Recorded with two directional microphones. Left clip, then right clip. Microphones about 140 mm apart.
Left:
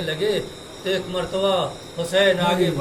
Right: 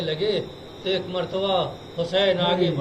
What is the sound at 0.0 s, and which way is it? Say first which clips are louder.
A man's voice: left 1 dB; 15° left (ahead or behind).